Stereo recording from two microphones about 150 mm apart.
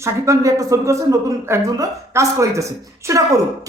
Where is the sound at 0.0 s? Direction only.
20° right (ahead or behind).